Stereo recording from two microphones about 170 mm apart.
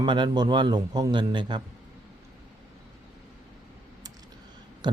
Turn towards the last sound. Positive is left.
turn(degrees=-25)  # may be behind; listen again after turning